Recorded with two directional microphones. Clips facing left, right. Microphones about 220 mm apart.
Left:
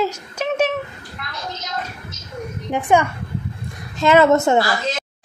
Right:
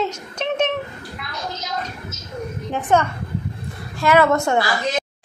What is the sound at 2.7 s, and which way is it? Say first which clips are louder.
A woman's voice: left 2 dB; 10° left (ahead or behind).